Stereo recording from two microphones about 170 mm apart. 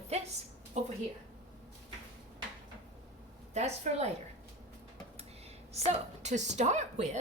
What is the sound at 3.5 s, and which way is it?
Speech, 40° right (ahead or behind).